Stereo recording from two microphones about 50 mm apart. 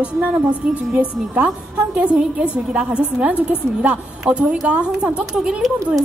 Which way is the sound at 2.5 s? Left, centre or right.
Centre.